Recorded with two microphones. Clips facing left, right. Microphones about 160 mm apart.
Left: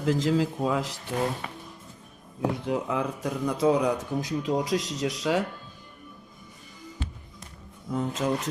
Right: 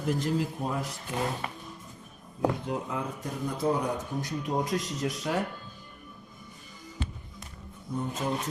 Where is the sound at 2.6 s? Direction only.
75° left (ahead or behind).